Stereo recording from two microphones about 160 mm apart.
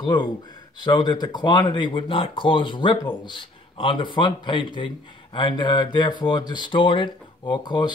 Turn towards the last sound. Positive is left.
turn(degrees=25)  # may be behind; listen again after turning